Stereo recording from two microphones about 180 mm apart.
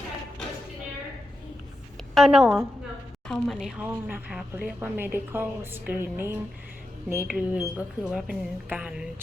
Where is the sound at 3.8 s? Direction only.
10° right (ahead or behind).